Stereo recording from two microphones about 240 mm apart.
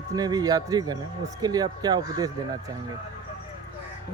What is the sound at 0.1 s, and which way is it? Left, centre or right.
Speech, centre.